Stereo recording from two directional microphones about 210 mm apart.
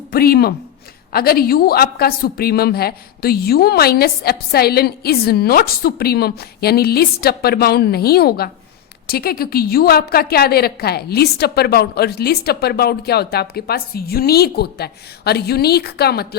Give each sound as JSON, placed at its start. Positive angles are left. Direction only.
{"t": 0.1, "sound": "a woman's voice", "side_deg": 45}